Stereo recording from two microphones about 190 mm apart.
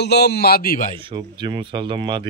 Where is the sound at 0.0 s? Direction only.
60° left (ahead or behind).